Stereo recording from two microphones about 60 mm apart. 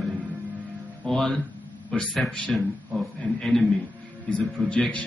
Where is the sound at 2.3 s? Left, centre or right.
Centre.